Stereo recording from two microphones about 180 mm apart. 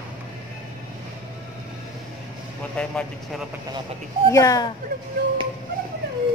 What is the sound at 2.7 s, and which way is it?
Vehicle, 5° left (ahead or behind).